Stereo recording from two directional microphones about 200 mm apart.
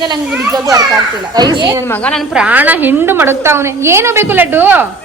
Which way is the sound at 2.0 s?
Centre (ahead or behind).